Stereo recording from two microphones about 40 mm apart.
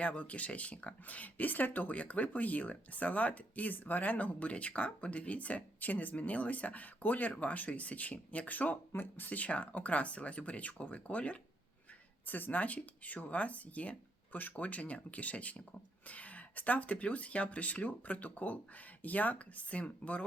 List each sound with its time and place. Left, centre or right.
0.0 s speech: left
8.9 s speech: left
12.2 s speech: left